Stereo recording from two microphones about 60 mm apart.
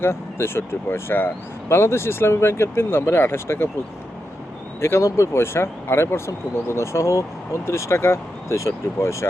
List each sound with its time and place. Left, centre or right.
0.0 s speech: left
4.8 s speech: left